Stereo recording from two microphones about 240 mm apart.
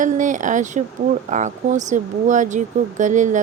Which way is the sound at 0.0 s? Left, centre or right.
Right.